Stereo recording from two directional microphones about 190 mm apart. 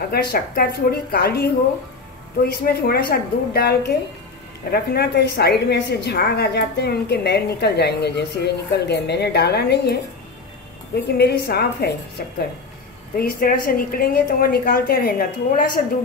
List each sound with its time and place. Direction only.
0.1 s a woman's voice: 55° left (ahead or behind)
11.1 s a woman's voice: 60° left (ahead or behind)